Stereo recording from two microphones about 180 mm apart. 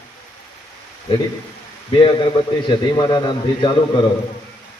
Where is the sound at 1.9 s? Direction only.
30° left (ahead or behind).